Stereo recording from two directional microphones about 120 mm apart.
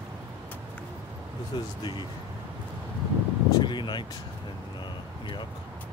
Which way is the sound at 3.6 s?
40° left (ahead or behind).